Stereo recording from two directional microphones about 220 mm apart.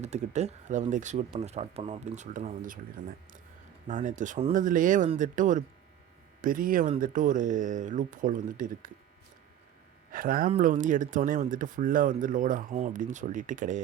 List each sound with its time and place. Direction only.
0.0 s speech: 30° right (ahead or behind)
10.1 s speech: 40° right (ahead or behind)